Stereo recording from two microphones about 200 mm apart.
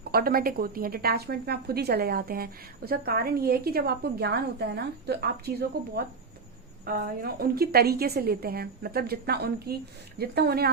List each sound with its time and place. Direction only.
0.1 s a woman's voice: 50° right (ahead or behind)